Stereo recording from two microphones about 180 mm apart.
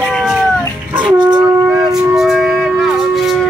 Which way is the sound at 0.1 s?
5° right (ahead or behind).